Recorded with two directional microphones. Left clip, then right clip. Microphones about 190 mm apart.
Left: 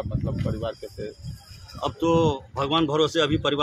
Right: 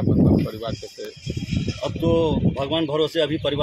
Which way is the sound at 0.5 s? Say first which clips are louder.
Even; 35° right (ahead or behind).